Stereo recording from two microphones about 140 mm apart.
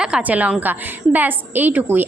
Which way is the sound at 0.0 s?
10° right (ahead or behind).